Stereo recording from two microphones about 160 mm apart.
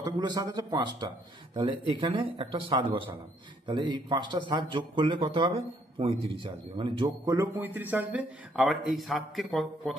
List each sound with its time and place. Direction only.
0.0 s speech: 25° right (ahead or behind)
7.2 s speech: 15° right (ahead or behind); by 9.9 s centre (ahead or behind)